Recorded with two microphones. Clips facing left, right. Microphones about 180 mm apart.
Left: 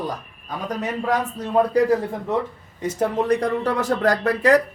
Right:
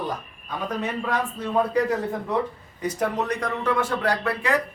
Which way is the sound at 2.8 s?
25° left (ahead or behind).